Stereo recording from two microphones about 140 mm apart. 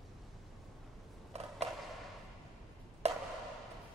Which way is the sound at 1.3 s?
50° right (ahead or behind).